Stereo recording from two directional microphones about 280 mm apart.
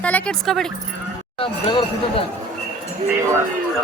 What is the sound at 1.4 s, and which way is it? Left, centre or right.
Speech, centre.